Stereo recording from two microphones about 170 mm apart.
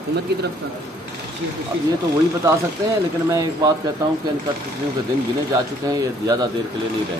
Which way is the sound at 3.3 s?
20° right (ahead or behind).